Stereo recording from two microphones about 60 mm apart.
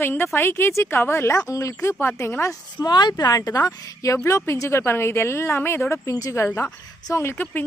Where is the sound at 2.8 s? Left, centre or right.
Left.